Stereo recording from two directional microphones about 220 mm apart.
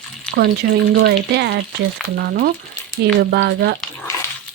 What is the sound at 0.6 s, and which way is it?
Speech, 45° right (ahead or behind).